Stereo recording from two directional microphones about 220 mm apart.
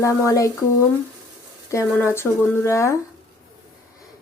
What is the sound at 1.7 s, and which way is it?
Speech, 10° left (ahead or behind).